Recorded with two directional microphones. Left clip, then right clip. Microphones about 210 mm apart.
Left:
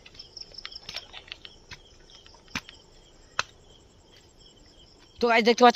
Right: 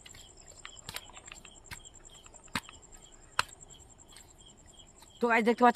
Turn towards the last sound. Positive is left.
turn(degrees=20)  # may be behind; listen again after turning